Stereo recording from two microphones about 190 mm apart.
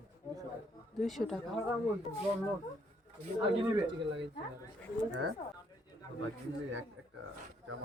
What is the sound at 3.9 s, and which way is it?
Speech, 70° right (ahead or behind).